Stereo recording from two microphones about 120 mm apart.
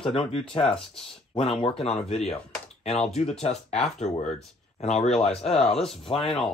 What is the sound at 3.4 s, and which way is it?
Speech, 60° left (ahead or behind).